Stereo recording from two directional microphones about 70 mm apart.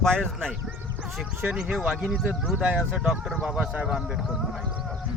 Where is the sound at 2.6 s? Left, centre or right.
Centre.